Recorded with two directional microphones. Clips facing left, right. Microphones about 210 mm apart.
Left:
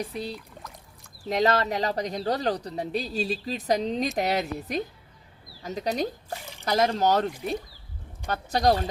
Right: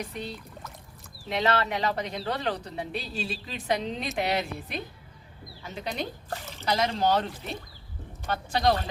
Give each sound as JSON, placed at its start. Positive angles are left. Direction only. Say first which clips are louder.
{"t": 0.0, "sound": "speech", "louder": "left 3 dB", "side_deg": 35}
{"t": 6.3, "sound": "a sound", "louder": "even", "side_deg": 15}
{"t": 6.7, "sound": "speech", "louder": "left 3 dB", "side_deg": 45}
{"t": 8.3, "sound": "speech", "louder": "left 2 dB", "side_deg": 40}